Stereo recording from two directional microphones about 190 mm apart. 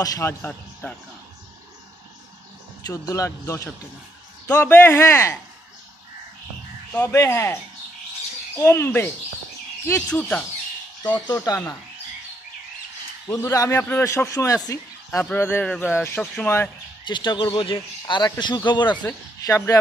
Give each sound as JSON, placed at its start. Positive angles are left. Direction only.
{"t": 0.0, "sound": "speech", "side_deg": 15}
{"t": 2.9, "sound": "a man's voice", "side_deg": 15}
{"t": 6.9, "sound": "a man's voice", "side_deg": 10}
{"t": 8.5, "sound": "a man's voice", "side_deg": 10}
{"t": 11.2, "sound": "a man's voice", "side_deg": 20}
{"t": 13.3, "sound": "a man's voice", "side_deg": 15}
{"t": 17.0, "sound": "a man's voice", "side_deg": 25}